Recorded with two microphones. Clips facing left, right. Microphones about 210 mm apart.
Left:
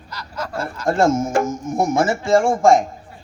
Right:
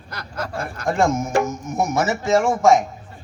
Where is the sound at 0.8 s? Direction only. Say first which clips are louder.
Left 3 dB; 45° left (ahead or behind).